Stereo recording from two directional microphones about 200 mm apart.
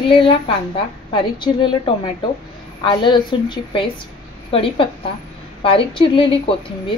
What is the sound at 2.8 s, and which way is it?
A woman's voice, 25° left (ahead or behind).